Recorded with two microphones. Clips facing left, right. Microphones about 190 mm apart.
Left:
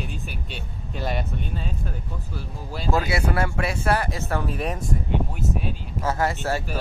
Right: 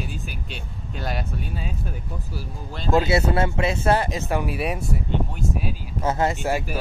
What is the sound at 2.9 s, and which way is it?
Speech, 25° right (ahead or behind).